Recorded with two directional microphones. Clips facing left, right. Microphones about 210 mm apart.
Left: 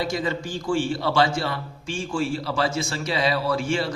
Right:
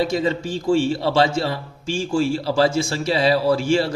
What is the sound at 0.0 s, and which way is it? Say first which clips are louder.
A man's voice: right 5 dB; 25° right (ahead or behind).